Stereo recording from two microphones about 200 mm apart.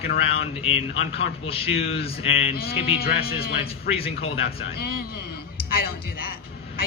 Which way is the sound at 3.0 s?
50° left (ahead or behind).